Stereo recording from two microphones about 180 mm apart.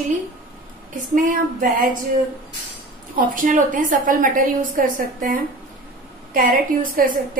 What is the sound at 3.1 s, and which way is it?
A woman's voice, 50° right (ahead or behind).